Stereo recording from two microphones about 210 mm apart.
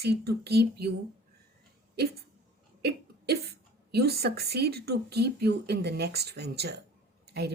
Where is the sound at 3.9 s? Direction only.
50° right (ahead or behind).